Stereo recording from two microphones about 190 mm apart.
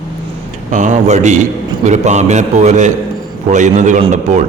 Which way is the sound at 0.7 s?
40° right (ahead or behind).